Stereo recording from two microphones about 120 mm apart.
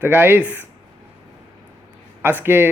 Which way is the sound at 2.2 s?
15° right (ahead or behind).